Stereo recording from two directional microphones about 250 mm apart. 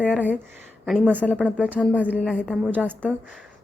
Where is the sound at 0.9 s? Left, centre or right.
Centre.